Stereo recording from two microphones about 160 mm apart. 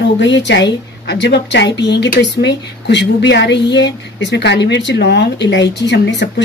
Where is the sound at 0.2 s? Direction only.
90° left.